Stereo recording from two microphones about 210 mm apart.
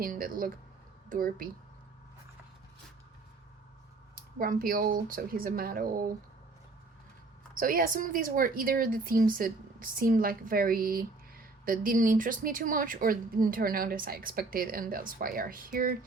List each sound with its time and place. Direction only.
0.0 s a woman's voice: 40° right (ahead or behind)
4.1 s a woman's voice: 40° right (ahead or behind)
7.5 s a woman's voice: 40° right (ahead or behind)